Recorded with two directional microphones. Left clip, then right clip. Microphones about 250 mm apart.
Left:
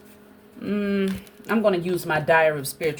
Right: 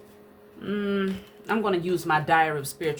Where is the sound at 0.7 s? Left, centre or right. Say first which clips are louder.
Left 2 dB; centre.